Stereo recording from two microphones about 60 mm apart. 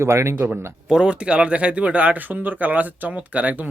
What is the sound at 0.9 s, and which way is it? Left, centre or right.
Speech, centre.